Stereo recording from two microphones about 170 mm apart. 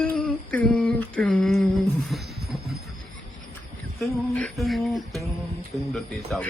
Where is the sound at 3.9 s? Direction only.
5° left (ahead or behind).